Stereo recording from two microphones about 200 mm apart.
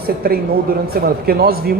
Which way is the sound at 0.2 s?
50° right (ahead or behind).